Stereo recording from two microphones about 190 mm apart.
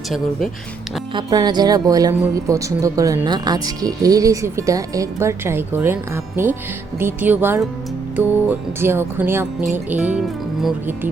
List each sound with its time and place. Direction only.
0.1 s speech: centre (ahead or behind)
1.1 s speech: 20° right (ahead or behind); by 11.1 s 5° right (ahead or behind)